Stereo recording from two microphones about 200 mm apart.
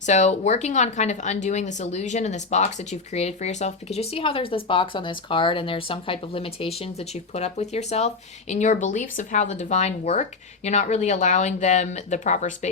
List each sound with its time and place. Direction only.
0.0 s speech: 35° left (ahead or behind)